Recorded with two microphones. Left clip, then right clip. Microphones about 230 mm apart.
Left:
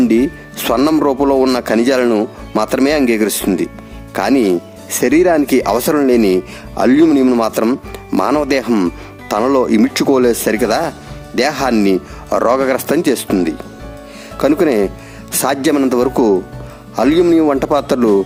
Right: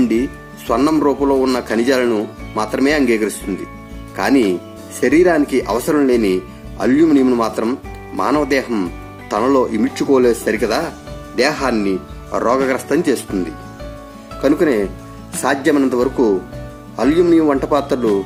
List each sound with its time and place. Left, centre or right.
0.0 s music: left
0.7 s speech: left